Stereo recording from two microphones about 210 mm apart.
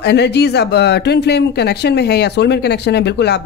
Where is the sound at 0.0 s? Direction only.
50° left (ahead or behind).